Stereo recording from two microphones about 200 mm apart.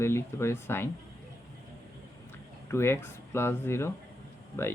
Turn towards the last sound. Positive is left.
turn(degrees=10)  # may be behind; listen again after turning